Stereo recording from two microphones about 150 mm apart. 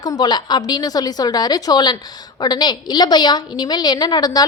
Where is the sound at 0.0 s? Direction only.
25° left (ahead or behind).